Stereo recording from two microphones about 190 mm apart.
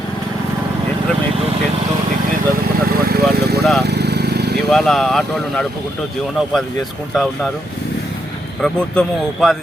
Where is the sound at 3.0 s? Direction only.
55° right (ahead or behind).